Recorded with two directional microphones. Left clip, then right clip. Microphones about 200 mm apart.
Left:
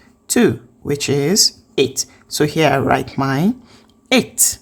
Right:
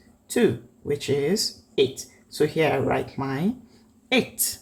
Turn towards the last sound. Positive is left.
turn(degrees=35)  # may be behind; listen again after turning